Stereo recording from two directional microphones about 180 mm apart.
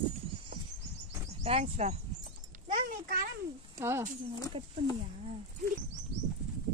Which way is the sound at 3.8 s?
15° right (ahead or behind).